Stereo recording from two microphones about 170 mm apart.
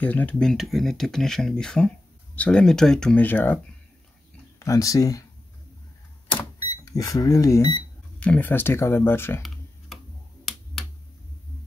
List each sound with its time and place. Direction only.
0.0 s speech: 10° left (ahead or behind)
4.6 s speech: 20° left (ahead or behind)
6.8 s speech: 20° left (ahead or behind)
8.2 s speech: 10° left (ahead or behind)
10.4 s finger snapping: centre (ahead or behind)